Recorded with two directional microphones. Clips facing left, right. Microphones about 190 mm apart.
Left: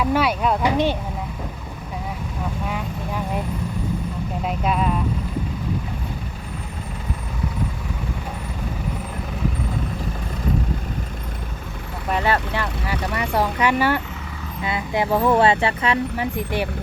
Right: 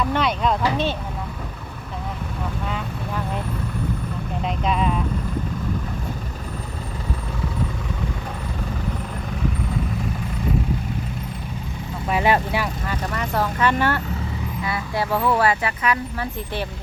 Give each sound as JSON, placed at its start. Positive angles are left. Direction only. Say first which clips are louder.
{"t": 0.0, "sound": "speech", "louder": "left 2 dB", "side_deg": 10}
{"t": 2.6, "sound": "vehicle", "louder": "left 1 dB", "side_deg": 10}
{"t": 4.4, "sound": "speech", "louder": "even", "side_deg": 5}
{"t": 12.1, "sound": "speech", "louder": "right 2 dB", "side_deg": -10}
{"t": 12.9, "sound": "speech", "louder": "left 5 dB", "side_deg": 10}
{"t": 16.1, "sound": "speech", "louder": "left 4 dB", "side_deg": 15}